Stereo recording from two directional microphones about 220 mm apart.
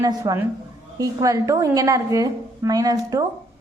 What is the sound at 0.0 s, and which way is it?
A woman's voice, 15° right (ahead or behind).